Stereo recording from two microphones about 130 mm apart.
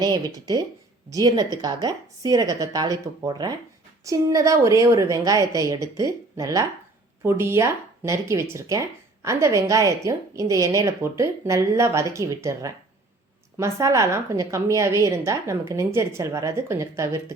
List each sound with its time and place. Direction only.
0.0 s a woman's voice: 30° right (ahead or behind)